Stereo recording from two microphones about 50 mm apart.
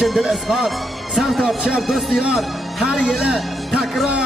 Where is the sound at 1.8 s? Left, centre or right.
Centre.